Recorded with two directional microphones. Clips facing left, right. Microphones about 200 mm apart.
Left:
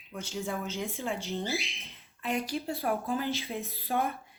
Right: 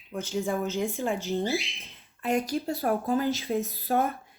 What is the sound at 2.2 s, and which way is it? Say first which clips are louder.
A woman's voice: right 5 dB; 45° right (ahead or behind).